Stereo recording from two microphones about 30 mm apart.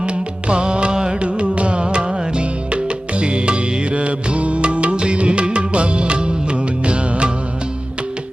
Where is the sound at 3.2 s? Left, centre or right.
Right.